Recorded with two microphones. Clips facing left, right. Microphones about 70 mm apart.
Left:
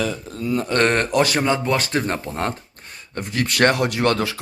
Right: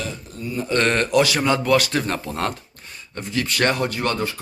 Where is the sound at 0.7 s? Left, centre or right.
Left.